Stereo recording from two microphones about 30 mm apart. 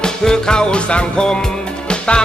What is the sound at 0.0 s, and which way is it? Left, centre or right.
Music, left.